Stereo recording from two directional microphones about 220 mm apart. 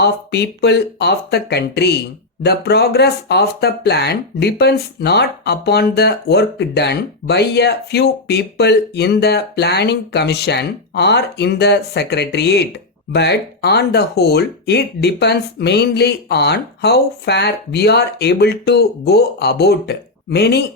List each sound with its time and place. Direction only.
0.0 s speech: 50° left (ahead or behind)